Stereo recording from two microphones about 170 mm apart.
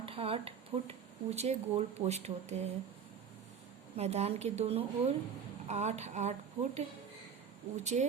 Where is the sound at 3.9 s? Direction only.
40° right (ahead or behind).